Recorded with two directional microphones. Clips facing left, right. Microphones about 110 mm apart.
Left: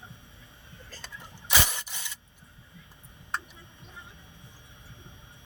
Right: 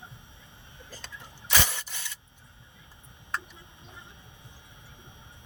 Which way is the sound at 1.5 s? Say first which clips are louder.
Even; 15° left (ahead or behind).